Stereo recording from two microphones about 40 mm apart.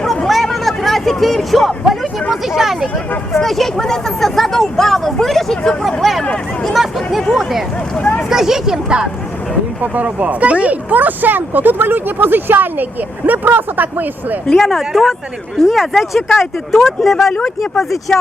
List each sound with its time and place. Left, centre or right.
0.3 s a sound: centre
2.3 s speech: centre
7.9 s speech: left
8.3 s speech: centre
9.8 s speech: right
14.4 s speech: centre